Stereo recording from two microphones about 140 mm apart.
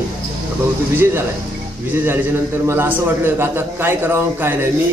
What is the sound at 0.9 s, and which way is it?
A man's voice, 15° right (ahead or behind).